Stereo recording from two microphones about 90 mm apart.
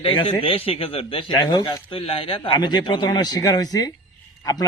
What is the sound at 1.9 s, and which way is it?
Speech, 90° left.